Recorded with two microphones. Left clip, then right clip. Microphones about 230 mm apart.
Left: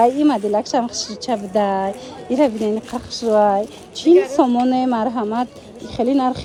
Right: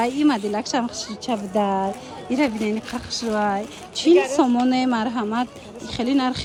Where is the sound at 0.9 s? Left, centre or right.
Centre.